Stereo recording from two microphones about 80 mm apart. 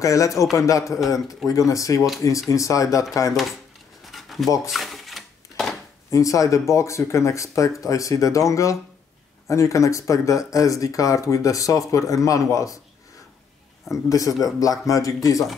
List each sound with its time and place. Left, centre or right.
0.0 s speech: left
4.0 s a sound: centre
4.6 s dishes: centre
6.0 s speech: left
14.0 s speech: left